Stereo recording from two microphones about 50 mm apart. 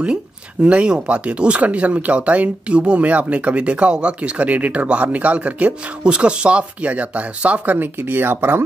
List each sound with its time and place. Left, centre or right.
0.0 s speech: right